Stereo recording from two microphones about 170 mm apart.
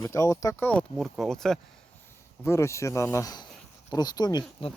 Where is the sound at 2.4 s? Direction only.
15° left (ahead or behind).